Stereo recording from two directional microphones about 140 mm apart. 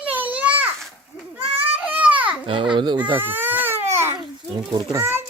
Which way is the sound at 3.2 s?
15° right (ahead or behind).